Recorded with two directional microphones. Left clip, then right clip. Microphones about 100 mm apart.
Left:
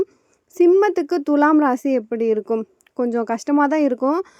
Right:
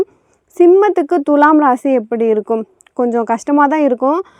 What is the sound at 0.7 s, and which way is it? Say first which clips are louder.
Speech: right 6 dB; 40° right (ahead or behind).